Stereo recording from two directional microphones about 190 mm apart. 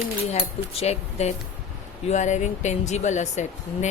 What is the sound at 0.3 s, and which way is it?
Speech, 30° left (ahead or behind).